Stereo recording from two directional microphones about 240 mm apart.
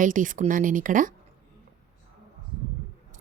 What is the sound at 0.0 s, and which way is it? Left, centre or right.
Speech, right.